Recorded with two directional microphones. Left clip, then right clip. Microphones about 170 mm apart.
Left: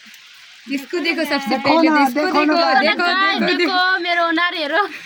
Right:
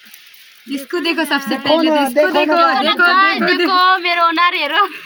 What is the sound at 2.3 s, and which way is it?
Speech, 30° left (ahead or behind).